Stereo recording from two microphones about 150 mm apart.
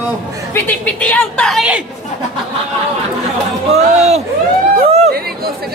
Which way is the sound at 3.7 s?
45° right (ahead or behind).